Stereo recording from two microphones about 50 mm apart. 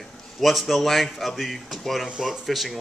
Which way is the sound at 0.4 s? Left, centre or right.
Centre.